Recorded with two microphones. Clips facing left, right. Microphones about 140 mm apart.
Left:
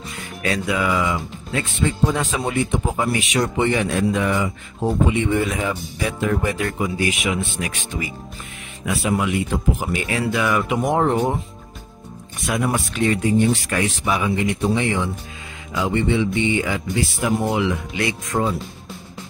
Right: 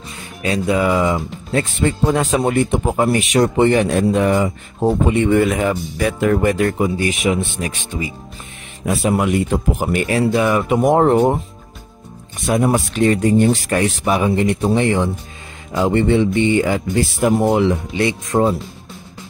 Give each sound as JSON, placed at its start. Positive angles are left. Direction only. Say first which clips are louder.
{"t": 0.2, "sound": "speech", "louder": "right 3 dB", "side_deg": -25}
{"t": 1.5, "sound": "speech", "louder": "right 5 dB", "side_deg": -45}
{"t": 7.0, "sound": "speech", "louder": "right 4 dB", "side_deg": -30}
{"t": 9.1, "sound": "speech", "louder": "right 3 dB", "side_deg": -45}
{"t": 10.2, "sound": "speech", "louder": "right 3 dB", "side_deg": -30}
{"t": 10.7, "sound": "speech", "louder": "right 9 dB", "side_deg": -45}
{"t": 12.4, "sound": "speech", "louder": "right 6 dB", "side_deg": -30}
{"t": 13.0, "sound": "speech", "louder": "right 4 dB", "side_deg": -45}
{"t": 17.6, "sound": "speech", "louder": "right 5 dB", "side_deg": -30}